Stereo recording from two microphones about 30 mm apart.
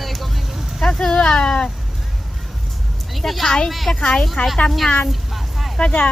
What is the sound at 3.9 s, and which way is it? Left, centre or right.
Speech, left.